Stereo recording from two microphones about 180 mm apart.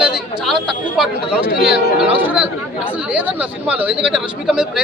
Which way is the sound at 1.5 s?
60° left (ahead or behind).